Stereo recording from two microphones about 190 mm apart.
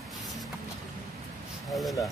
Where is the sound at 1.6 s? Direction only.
Centre (ahead or behind).